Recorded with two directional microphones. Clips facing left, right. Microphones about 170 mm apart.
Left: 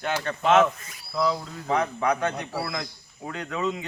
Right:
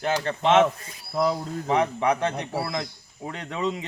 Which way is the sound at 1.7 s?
25° right (ahead or behind).